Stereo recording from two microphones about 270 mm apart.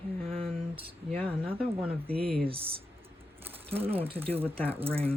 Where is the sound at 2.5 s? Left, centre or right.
Right.